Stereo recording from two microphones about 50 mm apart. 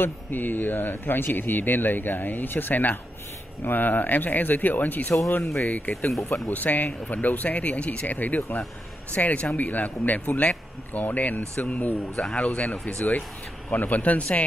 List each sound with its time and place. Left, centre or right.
0.0 s speech: left